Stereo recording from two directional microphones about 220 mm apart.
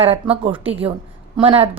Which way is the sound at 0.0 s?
25° right (ahead or behind).